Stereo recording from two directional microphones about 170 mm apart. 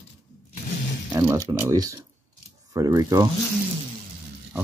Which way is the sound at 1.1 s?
20° right (ahead or behind).